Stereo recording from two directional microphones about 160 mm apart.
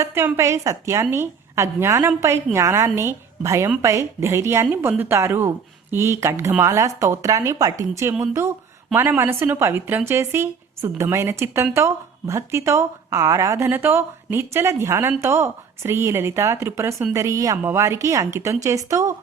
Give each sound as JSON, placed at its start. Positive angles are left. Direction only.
{"t": 0.0, "sound": "a woman's voice", "side_deg": -15}